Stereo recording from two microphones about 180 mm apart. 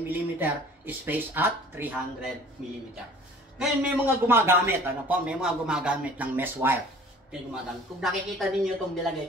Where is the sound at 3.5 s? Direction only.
10° right (ahead or behind).